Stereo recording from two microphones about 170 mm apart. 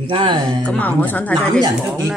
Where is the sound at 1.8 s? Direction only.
5° right (ahead or behind).